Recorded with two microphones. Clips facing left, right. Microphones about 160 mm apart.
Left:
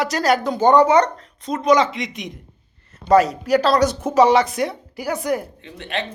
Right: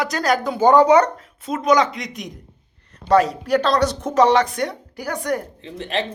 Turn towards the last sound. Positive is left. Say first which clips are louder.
# right 3 dB
turn(degrees=-35)  # may be behind; listen again after turning